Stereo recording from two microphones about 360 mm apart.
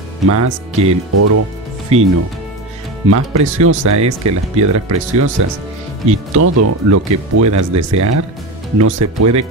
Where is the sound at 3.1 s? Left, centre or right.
Right.